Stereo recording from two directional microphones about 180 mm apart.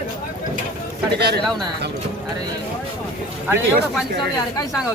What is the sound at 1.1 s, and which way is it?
Speech, 65° right (ahead or behind).